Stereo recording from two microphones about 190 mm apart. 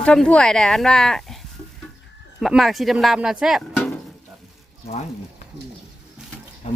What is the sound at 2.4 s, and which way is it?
Speech, centre (ahead or behind).